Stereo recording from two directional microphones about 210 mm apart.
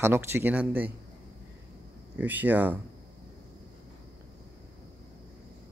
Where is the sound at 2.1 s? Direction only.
10° right (ahead or behind).